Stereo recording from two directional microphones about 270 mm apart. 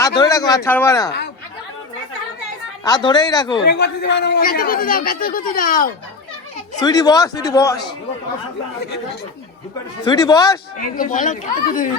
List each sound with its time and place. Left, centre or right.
0.2 s a man's voice: centre
2.8 s a man's voice: centre
3.6 s speech: left
6.7 s a man's voice: centre
10.1 s a man's voice: centre
10.8 s speech: left